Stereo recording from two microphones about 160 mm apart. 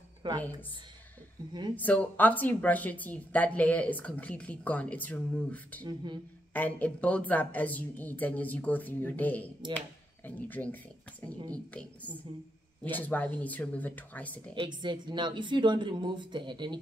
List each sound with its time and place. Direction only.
0.2 s a woman's voice: 30° right (ahead or behind)
1.8 s speech: 10° left (ahead or behind)
14.5 s a woman's voice: 30° right (ahead or behind)